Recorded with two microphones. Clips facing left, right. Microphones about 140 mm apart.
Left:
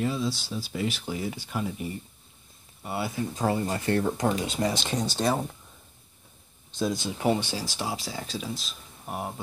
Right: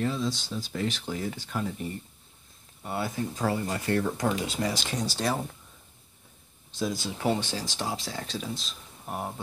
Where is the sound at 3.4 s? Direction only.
25° left (ahead or behind).